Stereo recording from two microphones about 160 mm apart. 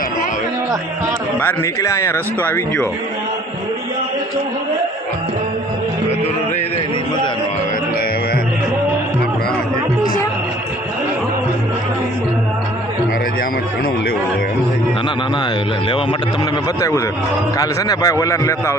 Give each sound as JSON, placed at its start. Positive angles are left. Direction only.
{"t": 1.4, "sound": "speech", "side_deg": 15}
{"t": 17.6, "sound": "a man's voice", "side_deg": 20}